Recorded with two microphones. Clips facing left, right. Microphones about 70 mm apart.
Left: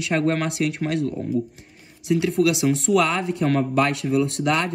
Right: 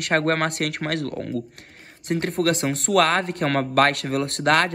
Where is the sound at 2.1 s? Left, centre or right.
Right.